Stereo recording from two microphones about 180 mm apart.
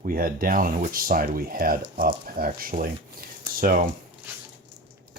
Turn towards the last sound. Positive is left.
turn(degrees=-50)  # may be behind; listen again after turning